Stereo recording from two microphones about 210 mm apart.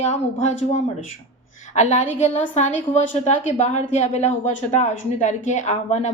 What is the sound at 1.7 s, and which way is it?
Speech, 35° left (ahead or behind).